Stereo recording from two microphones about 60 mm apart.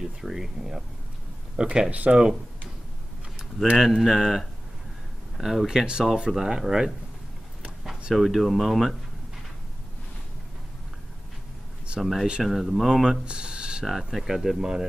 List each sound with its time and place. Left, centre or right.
0.0 s speech: centre; by 2.1 s right
2.1 s speech: centre
3.7 s speech: centre
8.1 s speech: centre
12.0 s speech: centre
13.2 s a sound: centre
13.8 s speech: centre